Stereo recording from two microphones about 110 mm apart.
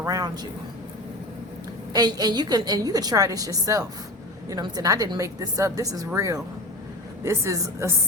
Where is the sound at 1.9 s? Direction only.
35° right (ahead or behind).